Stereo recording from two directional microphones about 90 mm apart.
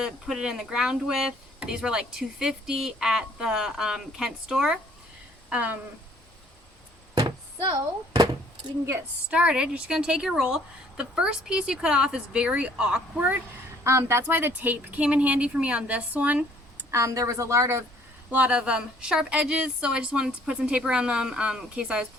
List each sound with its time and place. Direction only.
0.0 s speech: 5° right (ahead or behind)
5.5 s a sound: 15° right (ahead or behind)
8.1 s a sound: 45° right (ahead or behind)
9.3 s speech: 10° right (ahead or behind)
13.8 s speech: 30° right (ahead or behind)
16.9 s a woman's voice: 35° right (ahead or behind)
18.3 s speech: 15° right (ahead or behind)